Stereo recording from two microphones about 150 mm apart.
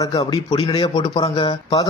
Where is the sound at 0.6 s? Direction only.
40° left (ahead or behind).